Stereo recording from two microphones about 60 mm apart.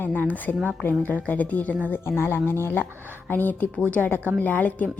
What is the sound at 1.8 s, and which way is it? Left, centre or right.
A woman's voice, left.